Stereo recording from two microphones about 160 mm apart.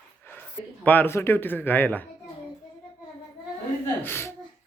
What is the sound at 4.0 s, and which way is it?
Speech, 15° left (ahead or behind).